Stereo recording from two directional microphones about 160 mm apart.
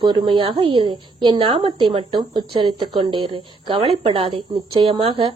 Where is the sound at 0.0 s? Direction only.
30° right (ahead or behind).